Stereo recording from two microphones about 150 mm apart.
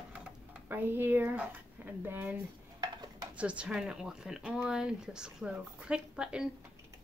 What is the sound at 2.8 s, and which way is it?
Stir, 25° right (ahead or behind).